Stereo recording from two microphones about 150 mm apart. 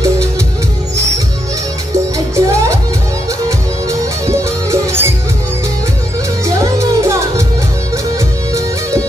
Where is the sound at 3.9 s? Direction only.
20° right (ahead or behind).